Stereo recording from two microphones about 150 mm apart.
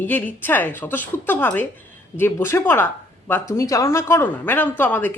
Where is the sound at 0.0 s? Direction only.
10° left (ahead or behind).